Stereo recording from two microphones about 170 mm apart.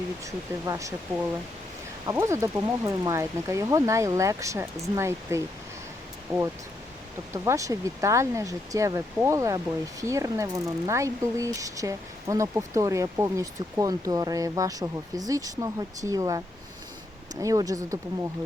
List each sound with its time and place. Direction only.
0.3 s speech: 20° right (ahead or behind)
17.4 s speech: 20° right (ahead or behind)